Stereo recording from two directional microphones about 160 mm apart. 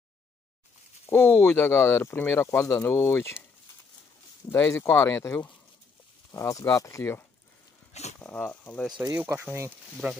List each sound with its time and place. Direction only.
1.0 s speech: 15° left (ahead or behind)
4.5 s speech: 15° left (ahead or behind)
7.9 s dog: 45° left (ahead or behind)
8.2 s speech: 10° left (ahead or behind)
9.1 s speech: 10° right (ahead or behind)